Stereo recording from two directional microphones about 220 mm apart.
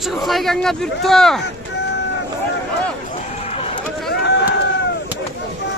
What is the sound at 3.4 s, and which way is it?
Run, 25° left (ahead or behind).